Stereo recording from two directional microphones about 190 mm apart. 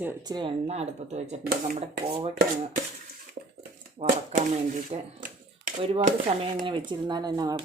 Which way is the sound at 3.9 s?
40° right (ahead or behind).